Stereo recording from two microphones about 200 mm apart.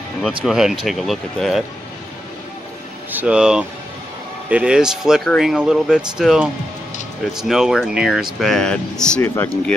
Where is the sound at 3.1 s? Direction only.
5° right (ahead or behind).